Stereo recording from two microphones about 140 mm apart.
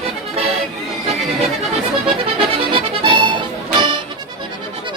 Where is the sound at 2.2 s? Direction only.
40° right (ahead or behind).